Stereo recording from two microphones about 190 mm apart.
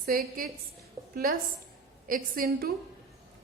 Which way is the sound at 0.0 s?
50° right (ahead or behind).